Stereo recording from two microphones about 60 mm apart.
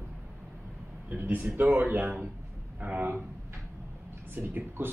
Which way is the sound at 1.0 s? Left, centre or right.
Right.